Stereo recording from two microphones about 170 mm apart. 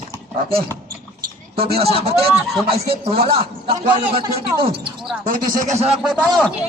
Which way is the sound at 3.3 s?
30° right (ahead or behind).